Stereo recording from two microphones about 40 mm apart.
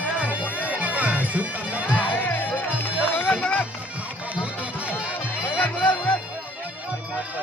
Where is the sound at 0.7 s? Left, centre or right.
Right.